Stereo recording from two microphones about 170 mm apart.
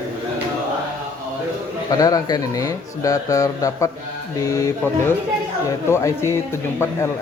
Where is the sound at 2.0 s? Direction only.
20° left (ahead or behind).